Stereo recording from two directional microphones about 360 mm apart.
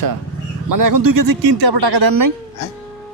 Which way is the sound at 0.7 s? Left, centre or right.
Right.